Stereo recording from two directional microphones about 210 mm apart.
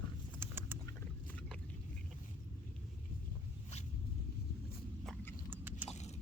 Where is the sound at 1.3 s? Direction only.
5° left (ahead or behind).